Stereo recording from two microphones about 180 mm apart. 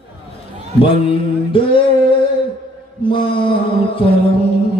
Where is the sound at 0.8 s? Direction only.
30° left (ahead or behind).